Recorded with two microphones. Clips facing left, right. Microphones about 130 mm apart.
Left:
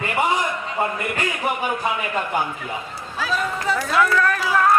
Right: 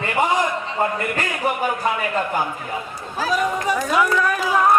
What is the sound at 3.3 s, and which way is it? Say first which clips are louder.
Speech: right 2 dB; 15° right (ahead or behind).